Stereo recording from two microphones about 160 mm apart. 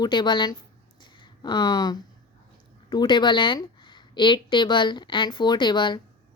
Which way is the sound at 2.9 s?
30° left (ahead or behind).